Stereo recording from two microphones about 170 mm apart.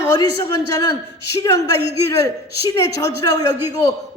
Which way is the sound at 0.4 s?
20° left (ahead or behind).